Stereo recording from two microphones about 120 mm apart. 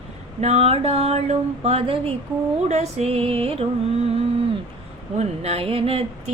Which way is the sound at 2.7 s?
65° right (ahead or behind).